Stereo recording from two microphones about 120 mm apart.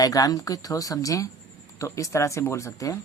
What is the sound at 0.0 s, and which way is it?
Speech, 30° left (ahead or behind).